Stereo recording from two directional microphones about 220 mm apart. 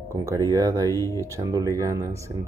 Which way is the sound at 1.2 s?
15° right (ahead or behind).